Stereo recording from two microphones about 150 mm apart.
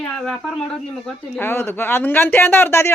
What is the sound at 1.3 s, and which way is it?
Speech, 15° left (ahead or behind).